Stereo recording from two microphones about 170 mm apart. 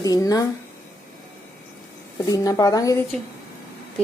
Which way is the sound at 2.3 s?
20° left (ahead or behind).